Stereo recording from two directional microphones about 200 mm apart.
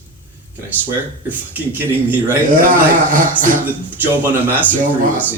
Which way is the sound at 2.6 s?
40° right (ahead or behind).